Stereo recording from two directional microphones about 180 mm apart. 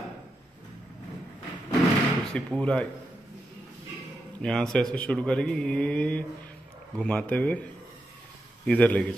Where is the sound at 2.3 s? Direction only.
5° left (ahead or behind).